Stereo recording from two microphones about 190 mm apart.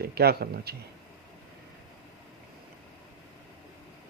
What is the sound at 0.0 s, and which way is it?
Speech, 55° right (ahead or behind).